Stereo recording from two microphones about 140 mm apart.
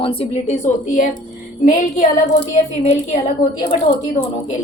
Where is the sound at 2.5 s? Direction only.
55° left (ahead or behind).